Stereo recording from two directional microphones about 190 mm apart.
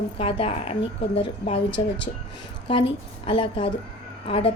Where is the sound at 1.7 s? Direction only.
75° left (ahead or behind).